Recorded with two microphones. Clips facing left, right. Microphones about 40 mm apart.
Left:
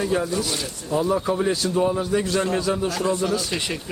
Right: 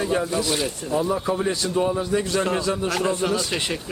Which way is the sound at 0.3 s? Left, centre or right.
Right.